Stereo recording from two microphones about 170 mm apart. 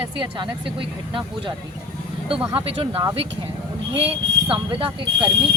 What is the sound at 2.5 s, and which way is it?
Speech, 35° right (ahead or behind).